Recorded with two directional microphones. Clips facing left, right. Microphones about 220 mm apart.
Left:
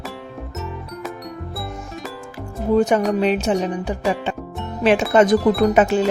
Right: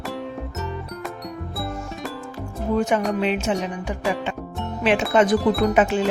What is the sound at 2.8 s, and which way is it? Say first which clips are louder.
Speech: left 4 dB; 35° left (ahead or behind).